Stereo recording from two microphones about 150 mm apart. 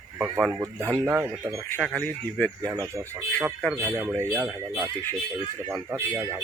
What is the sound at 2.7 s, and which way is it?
Speech, 20° right (ahead or behind).